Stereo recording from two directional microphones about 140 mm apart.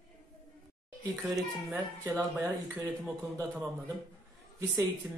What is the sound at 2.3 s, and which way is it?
Speech, 20° right (ahead or behind).